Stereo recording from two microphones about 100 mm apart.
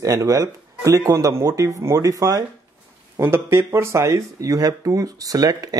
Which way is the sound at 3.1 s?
25° right (ahead or behind).